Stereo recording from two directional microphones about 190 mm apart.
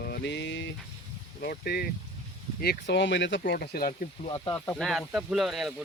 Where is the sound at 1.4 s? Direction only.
55° left (ahead or behind).